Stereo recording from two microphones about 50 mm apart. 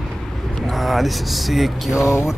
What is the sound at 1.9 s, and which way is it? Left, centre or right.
Speech, left.